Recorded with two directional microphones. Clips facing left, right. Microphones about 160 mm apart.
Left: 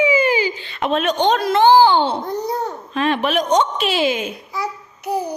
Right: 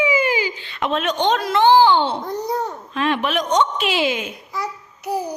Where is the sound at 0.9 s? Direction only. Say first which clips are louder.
Left 3 dB; 10° left (ahead or behind).